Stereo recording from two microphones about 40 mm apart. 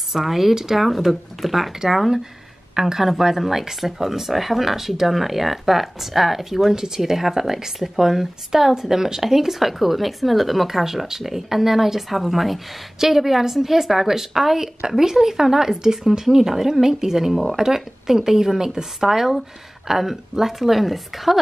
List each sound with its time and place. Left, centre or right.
0.1 s speech: centre
6.7 s speech: centre